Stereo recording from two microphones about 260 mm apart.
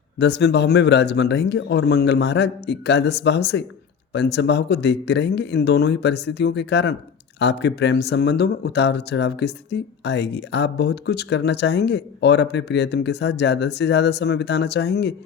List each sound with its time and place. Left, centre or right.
0.2 s speech: left